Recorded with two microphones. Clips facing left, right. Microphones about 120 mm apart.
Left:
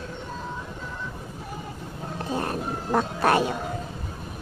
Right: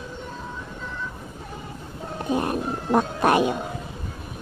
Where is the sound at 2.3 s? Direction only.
15° right (ahead or behind).